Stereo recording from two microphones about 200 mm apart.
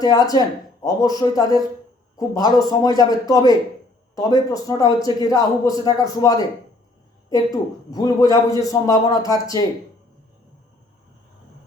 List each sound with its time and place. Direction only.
0.0 s a man's voice: 20° left (ahead or behind)